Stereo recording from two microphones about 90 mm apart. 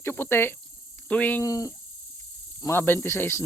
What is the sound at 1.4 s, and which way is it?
Speech, 40° left (ahead or behind).